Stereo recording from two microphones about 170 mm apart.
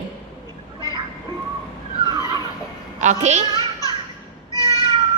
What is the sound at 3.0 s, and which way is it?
Speech, 45° right (ahead or behind).